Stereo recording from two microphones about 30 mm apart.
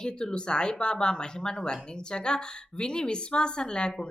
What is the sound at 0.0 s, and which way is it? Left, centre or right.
Speech, left.